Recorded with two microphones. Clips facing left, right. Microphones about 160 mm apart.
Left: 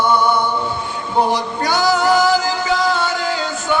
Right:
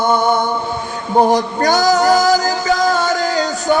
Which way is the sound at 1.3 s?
45° right (ahead or behind).